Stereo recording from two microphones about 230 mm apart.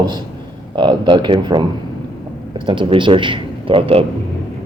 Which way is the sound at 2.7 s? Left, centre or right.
Right.